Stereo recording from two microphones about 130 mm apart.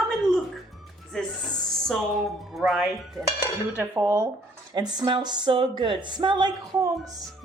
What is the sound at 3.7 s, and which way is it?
Cutlery, 15° right (ahead or behind).